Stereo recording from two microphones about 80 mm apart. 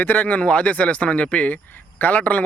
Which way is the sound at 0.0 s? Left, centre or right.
Centre.